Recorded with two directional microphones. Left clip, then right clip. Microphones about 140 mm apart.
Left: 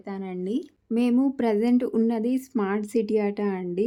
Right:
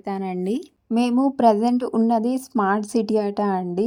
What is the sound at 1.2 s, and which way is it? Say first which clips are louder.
A woman's voice: right 7 dB; 25° right (ahead or behind).